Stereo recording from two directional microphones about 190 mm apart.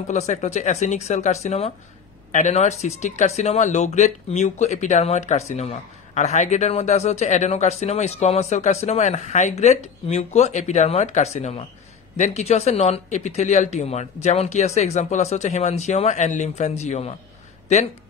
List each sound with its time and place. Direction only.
0.0 s speech: 35° left (ahead or behind)